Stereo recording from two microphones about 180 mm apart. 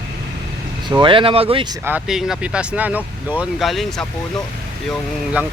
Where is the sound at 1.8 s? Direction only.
10° right (ahead or behind).